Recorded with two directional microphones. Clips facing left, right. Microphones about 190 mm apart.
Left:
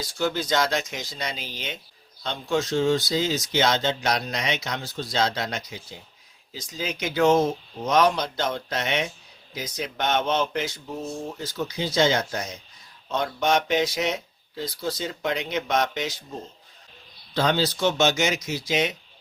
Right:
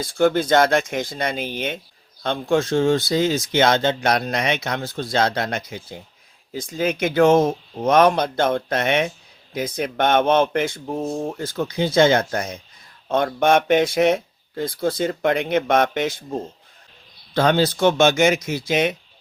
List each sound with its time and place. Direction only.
0.0 s speech: 55° right (ahead or behind)
17.3 s speech: 55° right (ahead or behind)